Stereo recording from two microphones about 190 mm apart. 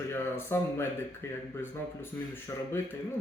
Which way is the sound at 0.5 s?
15° left (ahead or behind).